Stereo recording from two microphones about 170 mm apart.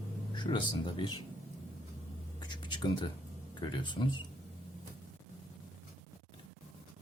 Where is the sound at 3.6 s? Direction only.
25° left (ahead or behind).